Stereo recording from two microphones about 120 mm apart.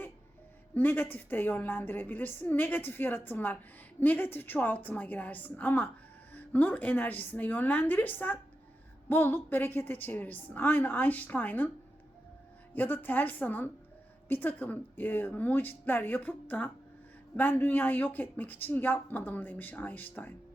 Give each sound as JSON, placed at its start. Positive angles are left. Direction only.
{"t": 0.7, "sound": "a woman's voice", "side_deg": 15}
{"t": 12.7, "sound": "a woman's voice", "side_deg": 15}